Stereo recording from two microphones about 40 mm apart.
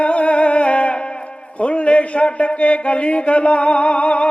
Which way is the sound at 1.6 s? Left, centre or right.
Left.